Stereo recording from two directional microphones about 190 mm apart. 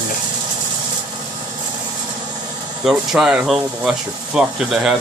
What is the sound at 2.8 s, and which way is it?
Speech, centre (ahead or behind).